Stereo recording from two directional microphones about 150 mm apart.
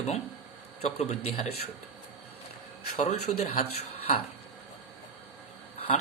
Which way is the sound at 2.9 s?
50° left (ahead or behind).